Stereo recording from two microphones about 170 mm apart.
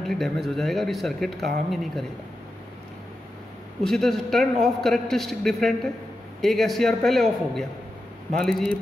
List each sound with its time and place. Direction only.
0.0 s speech: centre (ahead or behind)
3.8 s speech: centre (ahead or behind)